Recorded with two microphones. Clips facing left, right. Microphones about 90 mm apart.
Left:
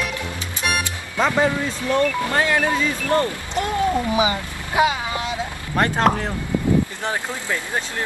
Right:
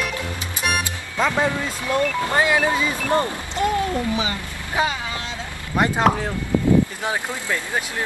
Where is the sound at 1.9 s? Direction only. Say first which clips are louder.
Even; 20° right (ahead or behind).